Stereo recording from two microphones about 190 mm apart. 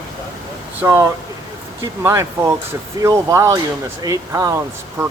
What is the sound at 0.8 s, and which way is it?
Speech, 15° right (ahead or behind).